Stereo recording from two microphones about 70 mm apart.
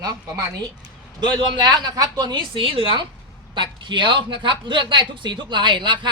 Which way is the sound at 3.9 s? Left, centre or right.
Right.